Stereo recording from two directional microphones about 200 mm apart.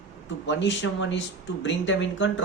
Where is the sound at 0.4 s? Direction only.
65° left (ahead or behind).